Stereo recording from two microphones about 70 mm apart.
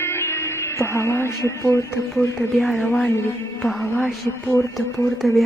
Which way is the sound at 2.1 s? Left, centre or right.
Centre.